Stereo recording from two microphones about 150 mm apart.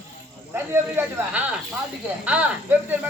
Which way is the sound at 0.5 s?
15° right (ahead or behind).